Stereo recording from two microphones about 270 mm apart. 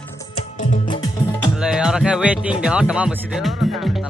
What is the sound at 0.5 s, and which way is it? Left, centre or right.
Music, left.